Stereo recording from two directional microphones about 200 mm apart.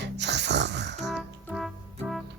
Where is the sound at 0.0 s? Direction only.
60° right (ahead or behind).